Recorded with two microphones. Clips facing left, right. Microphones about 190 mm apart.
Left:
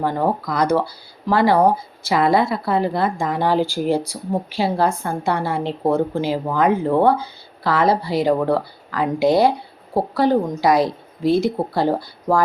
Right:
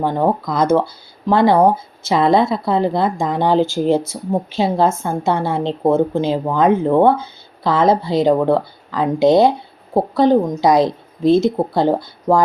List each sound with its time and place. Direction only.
0.0 s speech: 20° right (ahead or behind)